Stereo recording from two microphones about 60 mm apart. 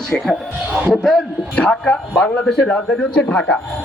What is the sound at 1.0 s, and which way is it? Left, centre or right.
Speech, centre.